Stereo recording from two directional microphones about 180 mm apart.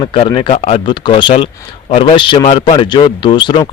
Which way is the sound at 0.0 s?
30° left (ahead or behind).